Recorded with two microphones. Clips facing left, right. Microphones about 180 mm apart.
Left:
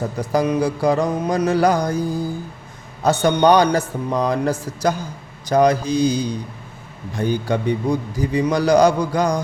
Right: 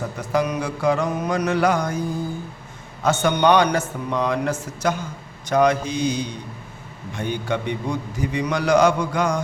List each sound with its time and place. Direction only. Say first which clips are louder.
0.2 s a man's voice: left 4 dB; 30° left (ahead or behind)